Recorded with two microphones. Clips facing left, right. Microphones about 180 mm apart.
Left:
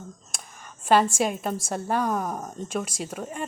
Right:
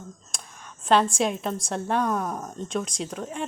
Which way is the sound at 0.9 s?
5° left (ahead or behind).